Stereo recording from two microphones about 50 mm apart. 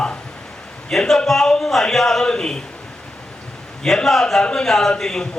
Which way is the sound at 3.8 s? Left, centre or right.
Centre.